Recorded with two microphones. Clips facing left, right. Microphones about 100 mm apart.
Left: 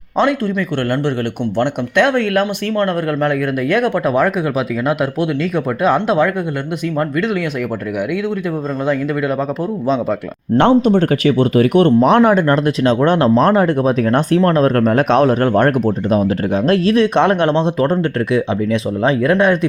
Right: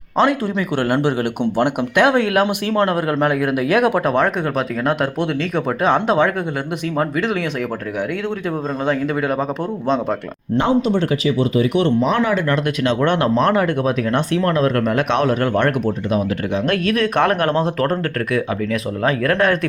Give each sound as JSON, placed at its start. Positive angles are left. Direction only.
{"t": 0.4, "sound": "speech", "side_deg": -10}
{"t": 10.6, "sound": "speech", "side_deg": 55}
{"t": 12.3, "sound": "speech", "side_deg": 40}